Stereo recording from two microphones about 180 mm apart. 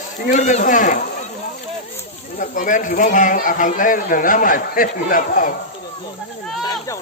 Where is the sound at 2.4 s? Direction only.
45° left (ahead or behind).